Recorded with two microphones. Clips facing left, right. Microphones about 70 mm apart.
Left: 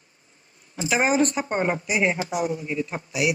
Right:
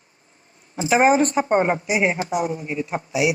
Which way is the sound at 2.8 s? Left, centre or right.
Right.